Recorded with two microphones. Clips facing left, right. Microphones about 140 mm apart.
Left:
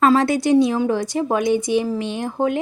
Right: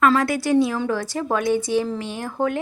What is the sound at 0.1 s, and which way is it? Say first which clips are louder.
A woman's voice: left 3 dB; 20° left (ahead or behind).